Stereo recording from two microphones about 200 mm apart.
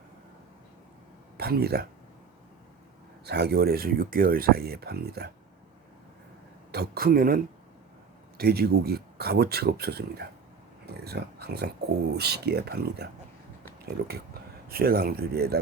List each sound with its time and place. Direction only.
1.4 s speech: 50° right (ahead or behind)
3.2 s speech: 55° right (ahead or behind)
6.7 s speech: 50° right (ahead or behind)